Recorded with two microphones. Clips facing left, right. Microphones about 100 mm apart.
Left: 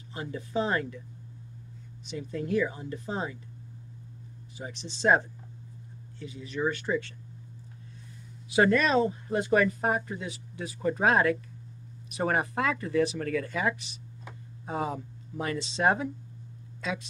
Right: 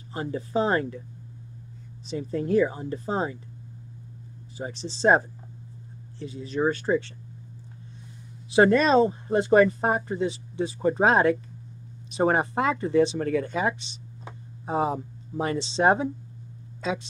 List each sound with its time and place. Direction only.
0.1 s speech: 35° right (ahead or behind)
2.0 s speech: 35° right (ahead or behind)
4.6 s speech: 35° right (ahead or behind)
8.5 s speech: 30° right (ahead or behind)